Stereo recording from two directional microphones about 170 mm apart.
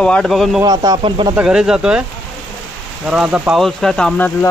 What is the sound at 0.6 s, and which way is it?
Speech, 25° right (ahead or behind).